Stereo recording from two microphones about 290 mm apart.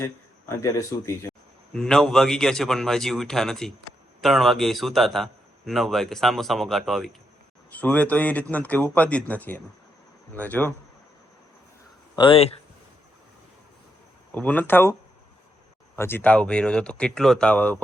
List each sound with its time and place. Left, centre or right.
0.0 s a man's voice: centre
12.1 s speech: centre
14.3 s a man's voice: centre
16.0 s a man's voice: centre